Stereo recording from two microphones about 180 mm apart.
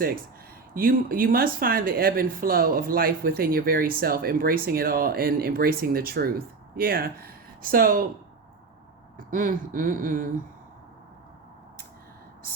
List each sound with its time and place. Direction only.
0.7 s speech: 50° right (ahead or behind)
9.1 s speech: 50° right (ahead or behind)